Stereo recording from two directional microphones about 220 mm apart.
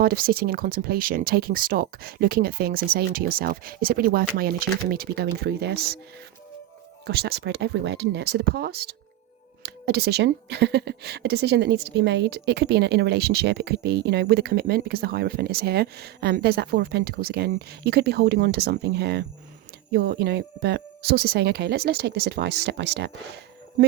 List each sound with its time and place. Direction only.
0.0 s speech: 40° right (ahead or behind)
7.0 s speech: 45° right (ahead or behind)